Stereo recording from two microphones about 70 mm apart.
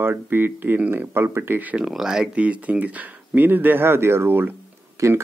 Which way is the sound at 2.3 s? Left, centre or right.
Centre.